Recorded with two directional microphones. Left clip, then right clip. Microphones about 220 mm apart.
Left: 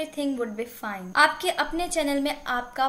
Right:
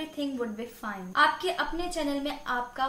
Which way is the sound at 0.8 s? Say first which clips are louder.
Left 3 dB; 35° left (ahead or behind).